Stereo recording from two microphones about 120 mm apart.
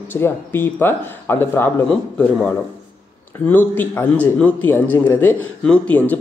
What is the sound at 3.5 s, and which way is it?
A man's voice, 15° left (ahead or behind).